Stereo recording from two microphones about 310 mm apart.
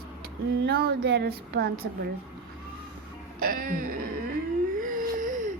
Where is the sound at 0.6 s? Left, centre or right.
Right.